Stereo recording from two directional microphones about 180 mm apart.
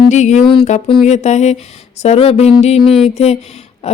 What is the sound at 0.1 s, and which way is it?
Speech, 40° left (ahead or behind).